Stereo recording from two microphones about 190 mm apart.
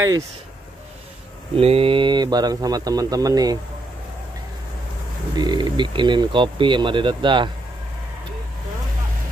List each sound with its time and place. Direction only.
1.6 s speech: 30° right (ahead or behind)
5.3 s speech: 25° right (ahead or behind)